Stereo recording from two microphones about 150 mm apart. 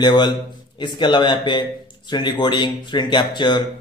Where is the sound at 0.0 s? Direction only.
30° left (ahead or behind).